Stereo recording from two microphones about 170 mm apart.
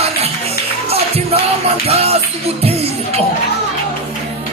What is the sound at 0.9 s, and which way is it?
Music, 35° right (ahead or behind).